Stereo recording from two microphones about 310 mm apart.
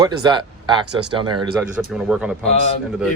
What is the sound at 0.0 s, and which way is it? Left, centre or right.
Speech, centre.